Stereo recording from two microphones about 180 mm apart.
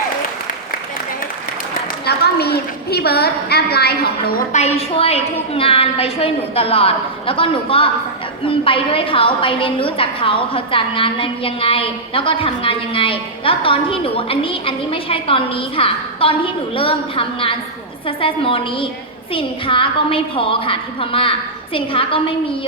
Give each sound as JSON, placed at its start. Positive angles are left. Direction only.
{"t": 2.0, "sound": "a woman's voice", "side_deg": 60}
{"t": 4.5, "sound": "a woman's voice", "side_deg": 35}